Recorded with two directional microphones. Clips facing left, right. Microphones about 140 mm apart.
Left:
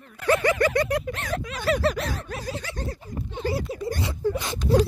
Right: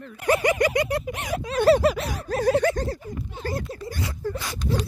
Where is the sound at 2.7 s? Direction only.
35° right (ahead or behind).